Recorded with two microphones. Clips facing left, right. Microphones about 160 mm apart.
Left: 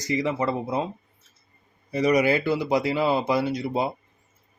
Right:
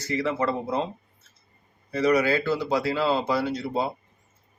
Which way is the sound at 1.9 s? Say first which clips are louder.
Left 1 dB; 15° left (ahead or behind).